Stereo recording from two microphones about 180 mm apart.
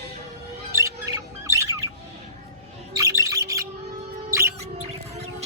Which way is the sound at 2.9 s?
15° right (ahead or behind).